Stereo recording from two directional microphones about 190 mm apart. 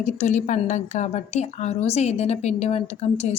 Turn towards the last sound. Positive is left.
turn(degrees=35)  # may be behind; listen again after turning